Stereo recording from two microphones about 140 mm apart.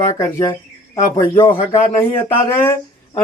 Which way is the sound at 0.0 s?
20° left (ahead or behind).